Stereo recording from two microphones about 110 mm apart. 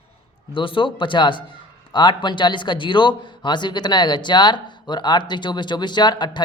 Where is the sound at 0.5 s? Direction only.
50° left (ahead or behind).